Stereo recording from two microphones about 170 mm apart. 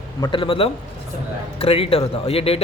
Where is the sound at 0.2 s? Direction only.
30° left (ahead or behind).